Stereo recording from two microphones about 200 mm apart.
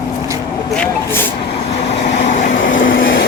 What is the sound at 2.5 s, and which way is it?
Vehicle, 70° left (ahead or behind).